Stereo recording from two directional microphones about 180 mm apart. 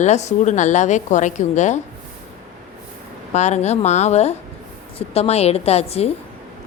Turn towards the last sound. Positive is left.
turn(degrees=35)  # may be behind; listen again after turning